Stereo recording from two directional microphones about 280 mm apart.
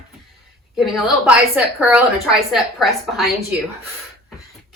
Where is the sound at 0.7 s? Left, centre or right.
Centre.